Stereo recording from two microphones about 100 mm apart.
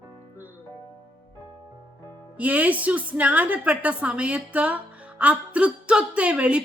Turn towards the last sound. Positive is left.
turn(degrees=-10)  # may be behind; listen again after turning